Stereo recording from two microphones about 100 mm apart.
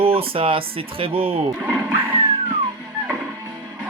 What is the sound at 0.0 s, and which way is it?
Speech, 70° right (ahead or behind).